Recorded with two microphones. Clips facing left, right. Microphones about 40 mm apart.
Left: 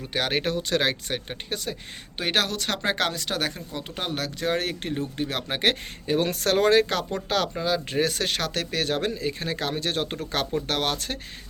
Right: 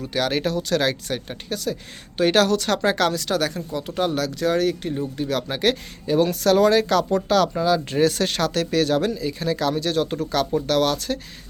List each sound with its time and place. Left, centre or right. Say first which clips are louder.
0.0 s speech: right 3 dB; left
2.1 s speech: right 8 dB; centre
4.6 s speech: right 6 dB; left